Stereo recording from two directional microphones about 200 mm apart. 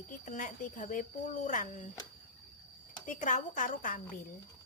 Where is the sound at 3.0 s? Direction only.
40° left (ahead or behind).